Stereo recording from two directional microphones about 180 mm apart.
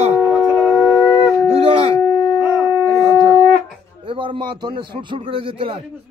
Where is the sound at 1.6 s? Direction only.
30° right (ahead or behind).